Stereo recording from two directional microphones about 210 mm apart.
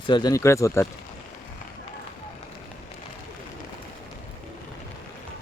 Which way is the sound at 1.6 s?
40° left (ahead or behind).